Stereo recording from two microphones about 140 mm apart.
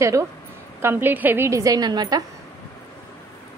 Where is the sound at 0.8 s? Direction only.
15° right (ahead or behind).